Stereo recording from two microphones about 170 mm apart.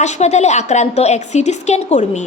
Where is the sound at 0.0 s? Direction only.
40° left (ahead or behind).